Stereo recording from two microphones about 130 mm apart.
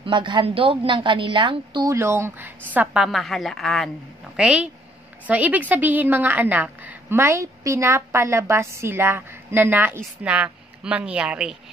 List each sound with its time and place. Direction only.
0.0 s a woman's voice: 40° right (ahead or behind)
1.9 s a woman's voice: 20° right (ahead or behind)